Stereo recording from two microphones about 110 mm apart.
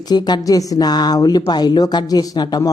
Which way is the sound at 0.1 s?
40° left (ahead or behind).